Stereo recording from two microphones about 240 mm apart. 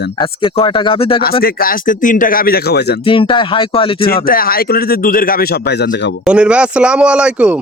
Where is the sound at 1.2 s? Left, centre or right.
Left.